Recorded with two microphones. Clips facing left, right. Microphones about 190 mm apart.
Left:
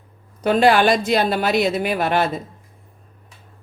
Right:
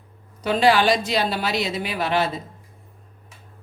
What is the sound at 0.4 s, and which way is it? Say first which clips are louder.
A woman's voice: left 3 dB; 50° left (ahead or behind).